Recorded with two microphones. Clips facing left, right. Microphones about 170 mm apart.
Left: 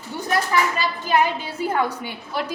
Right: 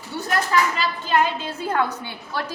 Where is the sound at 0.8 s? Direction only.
10° left (ahead or behind).